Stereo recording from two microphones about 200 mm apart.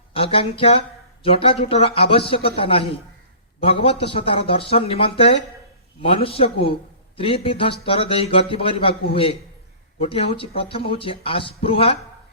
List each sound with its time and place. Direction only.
0.1 s speech: 25° left (ahead or behind)
10.0 s speech: 25° left (ahead or behind)